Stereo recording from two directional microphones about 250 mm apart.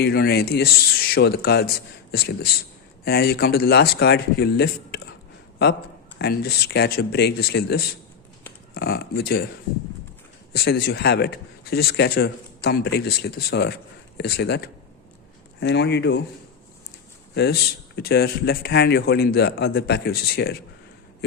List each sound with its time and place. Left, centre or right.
0.0 s a man's voice: left
6.1 s a man's voice: left
10.5 s a man's voice: left
17.3 s a man's voice: left